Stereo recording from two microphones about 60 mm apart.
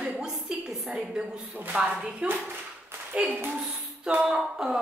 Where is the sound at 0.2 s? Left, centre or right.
Centre.